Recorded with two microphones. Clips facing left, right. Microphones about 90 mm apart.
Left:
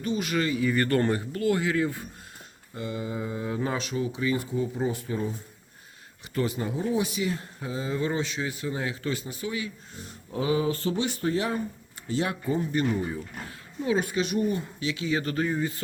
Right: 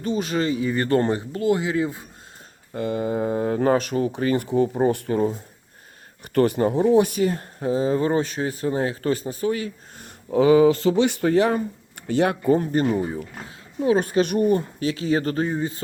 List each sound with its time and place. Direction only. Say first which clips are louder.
0.0 s speech: right 4 dB; 35° right (ahead or behind)
2.7 s speech: right 8 dB; 55° right (ahead or behind)
10.3 s speech: right 11 dB; 90° right; by 12.7 s 60° right (ahead or behind)
12.7 s speech: right 5 dB; 40° right (ahead or behind)